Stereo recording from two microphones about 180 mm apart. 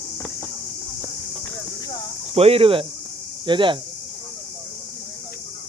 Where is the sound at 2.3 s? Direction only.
30° right (ahead or behind).